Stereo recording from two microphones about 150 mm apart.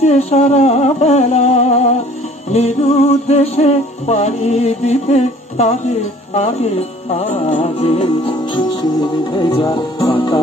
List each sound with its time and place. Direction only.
0.0 s music: 45° left (ahead or behind)